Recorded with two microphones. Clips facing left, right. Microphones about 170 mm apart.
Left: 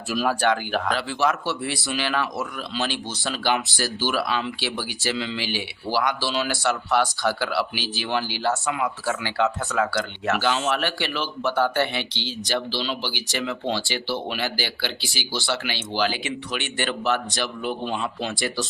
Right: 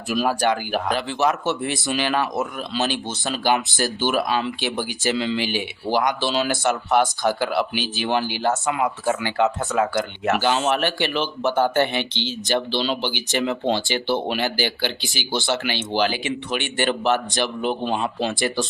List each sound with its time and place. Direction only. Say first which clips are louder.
0.1 s speech: right 1 dB; 15° right (ahead or behind)
13.4 s speech: right 5 dB; 40° right (ahead or behind)
13.7 s speech: right 5 dB; 20° right (ahead or behind)
17.8 s speech: right 4 dB; 35° right (ahead or behind)
18.3 s speech: right 4 dB; 20° right (ahead or behind)